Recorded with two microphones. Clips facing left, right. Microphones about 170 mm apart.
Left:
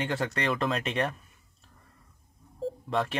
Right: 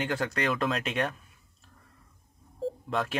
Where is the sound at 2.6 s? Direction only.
Centre (ahead or behind).